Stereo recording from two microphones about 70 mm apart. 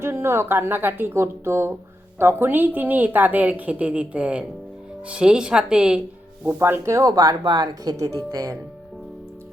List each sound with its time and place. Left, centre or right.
0.0 s a woman's voice: right; by 6.0 s centre
6.6 s speech: right
7.1 s speech: right
7.9 s speech: right